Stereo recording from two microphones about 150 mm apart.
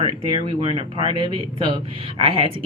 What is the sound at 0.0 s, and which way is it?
Speech, 35° right (ahead or behind).